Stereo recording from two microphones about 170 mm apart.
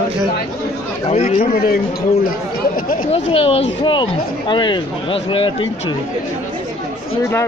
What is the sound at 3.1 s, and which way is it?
Speech, 35° left (ahead or behind).